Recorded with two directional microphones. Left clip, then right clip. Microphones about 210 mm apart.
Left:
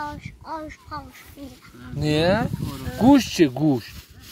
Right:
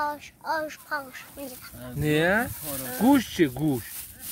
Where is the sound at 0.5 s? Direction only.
15° right (ahead or behind).